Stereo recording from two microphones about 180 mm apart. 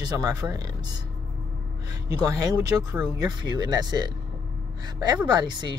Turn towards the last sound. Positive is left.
turn(degrees=-25)  # may be behind; listen again after turning